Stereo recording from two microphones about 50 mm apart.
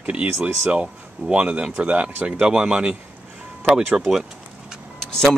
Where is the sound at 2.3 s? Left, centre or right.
Centre.